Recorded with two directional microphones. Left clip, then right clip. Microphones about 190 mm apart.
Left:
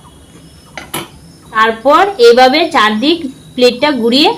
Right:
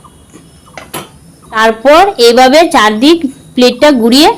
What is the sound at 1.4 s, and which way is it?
A woman's voice, 50° right (ahead or behind).